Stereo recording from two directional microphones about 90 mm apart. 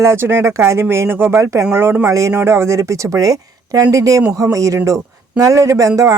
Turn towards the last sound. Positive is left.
turn(degrees=-40)  # may be behind; listen again after turning